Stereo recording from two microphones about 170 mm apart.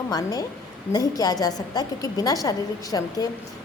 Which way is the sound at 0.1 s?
20° left (ahead or behind).